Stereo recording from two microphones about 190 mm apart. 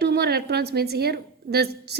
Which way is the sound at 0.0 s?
60° right (ahead or behind).